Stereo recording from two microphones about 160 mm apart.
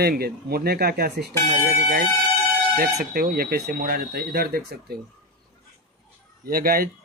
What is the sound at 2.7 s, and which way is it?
Speech, 70° right (ahead or behind).